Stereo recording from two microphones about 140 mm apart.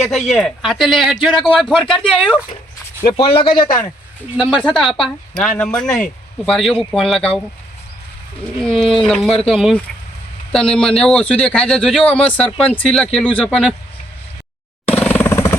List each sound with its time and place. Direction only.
0.1 s speech: centre (ahead or behind)
3.1 s speech: 40° left (ahead or behind)
4.4 s speech: centre (ahead or behind)
8.9 s a man's voice: centre (ahead or behind)
13.4 s speech: 5° right (ahead or behind)
14.8 s a sound: 10° left (ahead or behind)